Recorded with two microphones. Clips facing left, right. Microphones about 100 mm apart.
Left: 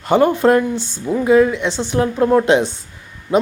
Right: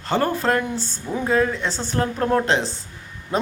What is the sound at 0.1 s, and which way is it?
A man's voice, 20° left (ahead or behind).